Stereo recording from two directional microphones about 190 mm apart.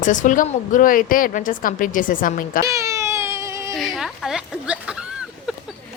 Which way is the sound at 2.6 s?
15° right (ahead or behind).